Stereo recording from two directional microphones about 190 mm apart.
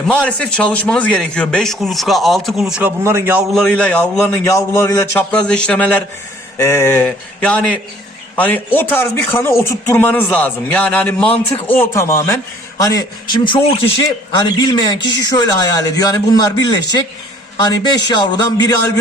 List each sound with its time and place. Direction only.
0.1 s a man's voice: 5° left (ahead or behind)
3.0 s a man's voice: 15° right (ahead or behind)
3.5 s a man's voice: 5° left (ahead or behind); by 18.3 s 25° left (ahead or behind)